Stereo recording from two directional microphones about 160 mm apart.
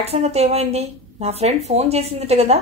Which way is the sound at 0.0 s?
40° right (ahead or behind).